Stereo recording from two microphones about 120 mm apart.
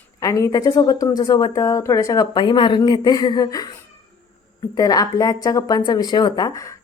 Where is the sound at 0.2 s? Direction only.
25° left (ahead or behind).